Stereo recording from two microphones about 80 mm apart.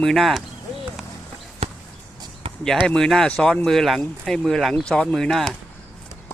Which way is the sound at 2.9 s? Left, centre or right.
Centre.